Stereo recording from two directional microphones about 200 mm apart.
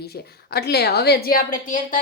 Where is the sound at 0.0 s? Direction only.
55° left (ahead or behind).